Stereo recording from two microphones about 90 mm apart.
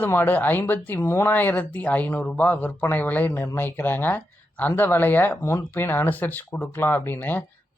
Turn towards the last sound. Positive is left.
turn(degrees=20)  # may be behind; listen again after turning